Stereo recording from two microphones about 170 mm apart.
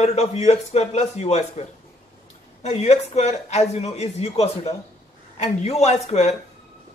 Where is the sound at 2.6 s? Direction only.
40° left (ahead or behind).